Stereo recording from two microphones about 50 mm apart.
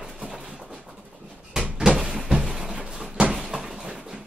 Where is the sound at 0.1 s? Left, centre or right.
Centre.